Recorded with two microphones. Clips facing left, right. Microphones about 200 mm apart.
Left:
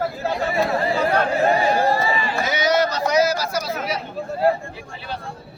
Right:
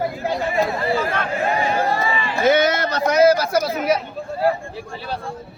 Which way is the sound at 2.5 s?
55° right (ahead or behind).